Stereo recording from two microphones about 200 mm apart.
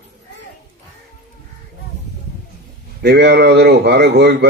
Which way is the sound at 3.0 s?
55° right (ahead or behind).